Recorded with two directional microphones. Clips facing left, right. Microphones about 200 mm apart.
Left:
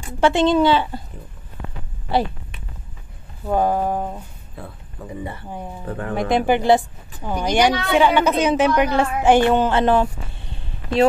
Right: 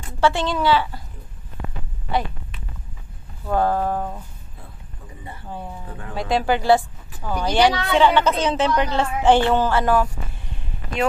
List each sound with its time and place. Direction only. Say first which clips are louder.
0.0 s a woman's voice: left 4 dB; 20° left (ahead or behind)
3.4 s a woman's voice: left 1 dB; 15° left (ahead or behind)
4.6 s speech: left 10 dB; 75° left (ahead or behind)
5.9 s speech: left 9 dB; 65° left (ahead or behind)
6.1 s a woman's voice: left 3 dB; 20° left (ahead or behind)